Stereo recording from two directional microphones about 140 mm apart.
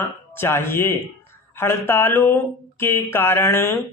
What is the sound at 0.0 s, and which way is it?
Speech, 15° left (ahead or behind).